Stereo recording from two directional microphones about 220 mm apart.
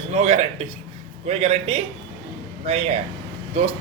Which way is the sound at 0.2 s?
30° right (ahead or behind).